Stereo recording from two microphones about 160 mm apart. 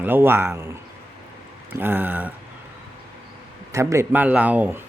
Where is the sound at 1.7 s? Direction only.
15° right (ahead or behind).